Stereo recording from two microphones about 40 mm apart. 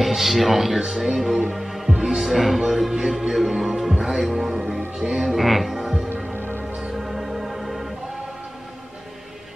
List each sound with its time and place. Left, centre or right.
0.0 s speech: centre
2.6 s music: centre
4.0 s speech: centre
5.2 s speech: centre
6.3 s music: right
7.0 s music: centre